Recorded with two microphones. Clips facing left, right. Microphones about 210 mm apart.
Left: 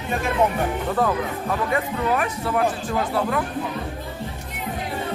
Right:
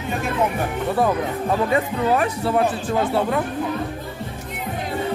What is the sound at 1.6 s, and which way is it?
Speech, 30° right (ahead or behind).